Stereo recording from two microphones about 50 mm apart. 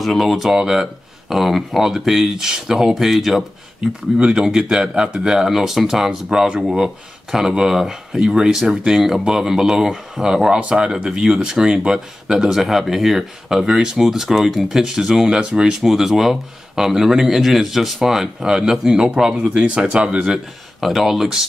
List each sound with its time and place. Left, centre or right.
0.0 s speech: centre
1.3 s speech: centre
4.2 s speech: centre
6.3 s speech: centre
6.6 s speech: centre
15.8 s speech: centre; by 20.2 s right
20.8 s speech: centre